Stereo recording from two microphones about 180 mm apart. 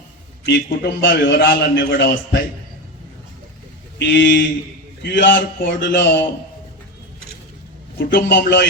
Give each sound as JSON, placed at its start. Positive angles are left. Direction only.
{"t": 0.4, "sound": "a man's voice", "side_deg": 70}
{"t": 3.9, "sound": "a man's voice", "side_deg": 75}
{"t": 7.9, "sound": "a man's voice", "side_deg": 60}